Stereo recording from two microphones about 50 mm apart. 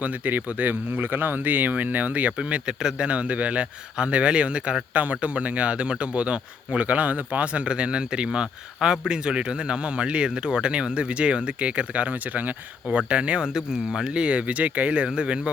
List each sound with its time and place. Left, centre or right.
0.0 s speech: right; by 3.1 s centre
3.1 s speech: right